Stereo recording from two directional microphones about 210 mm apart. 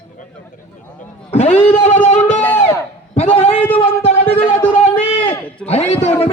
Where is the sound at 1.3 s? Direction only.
30° left (ahead or behind).